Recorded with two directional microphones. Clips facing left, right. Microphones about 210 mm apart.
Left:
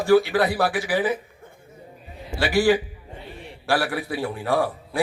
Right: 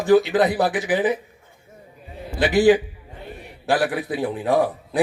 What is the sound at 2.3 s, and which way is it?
Speech, 20° right (ahead or behind).